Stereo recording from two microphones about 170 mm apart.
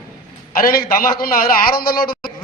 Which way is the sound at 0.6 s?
60° left (ahead or behind).